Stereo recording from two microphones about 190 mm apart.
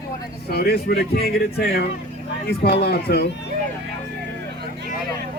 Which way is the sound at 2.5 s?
55° left (ahead or behind).